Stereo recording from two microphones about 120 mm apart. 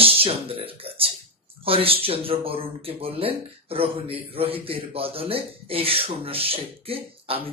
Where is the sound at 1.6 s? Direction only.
50° right (ahead or behind).